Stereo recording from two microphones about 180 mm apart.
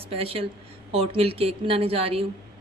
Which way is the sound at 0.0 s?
30° right (ahead or behind).